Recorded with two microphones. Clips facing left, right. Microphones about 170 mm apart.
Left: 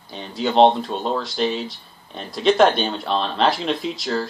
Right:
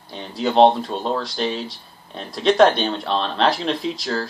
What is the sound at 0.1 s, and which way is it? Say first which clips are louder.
Speech: right 1 dB; centre (ahead or behind).